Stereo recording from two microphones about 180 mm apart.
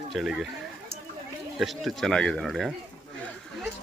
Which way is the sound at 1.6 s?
Centre (ahead or behind).